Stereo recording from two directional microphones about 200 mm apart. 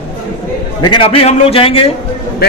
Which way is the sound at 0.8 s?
25° left (ahead or behind).